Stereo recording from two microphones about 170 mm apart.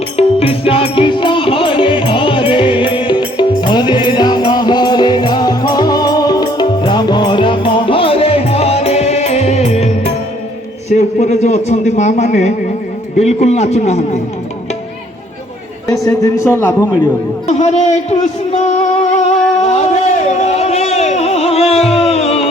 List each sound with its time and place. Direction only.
0.2 s music: 35° left (ahead or behind)
10.8 s a sound: 40° left (ahead or behind)
13.1 s a man's voice: 40° left (ahead or behind)
15.9 s a man's voice: 20° left (ahead or behind)
17.4 s music: 40° left (ahead or behind)
19.6 s a sound: 40° left (ahead or behind)